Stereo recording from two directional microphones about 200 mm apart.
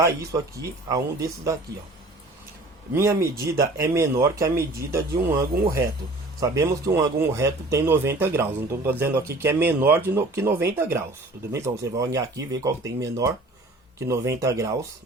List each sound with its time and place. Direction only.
0.0 s speech: 15° right (ahead or behind)
2.9 s speech: 15° right (ahead or behind)